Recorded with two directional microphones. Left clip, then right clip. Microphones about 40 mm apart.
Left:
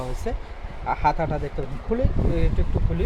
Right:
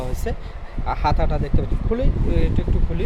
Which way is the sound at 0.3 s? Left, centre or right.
Right.